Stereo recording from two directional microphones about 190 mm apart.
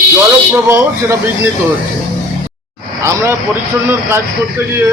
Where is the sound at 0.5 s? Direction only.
10° right (ahead or behind).